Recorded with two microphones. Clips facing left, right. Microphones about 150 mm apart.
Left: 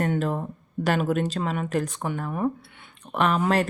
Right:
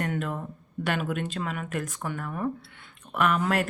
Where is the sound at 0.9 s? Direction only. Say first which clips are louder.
Left 6 dB; 35° left (ahead or behind).